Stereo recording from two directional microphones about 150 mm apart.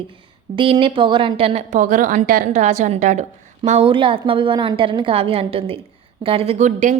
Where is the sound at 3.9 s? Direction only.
35° right (ahead or behind); by 6.9 s 55° right (ahead or behind).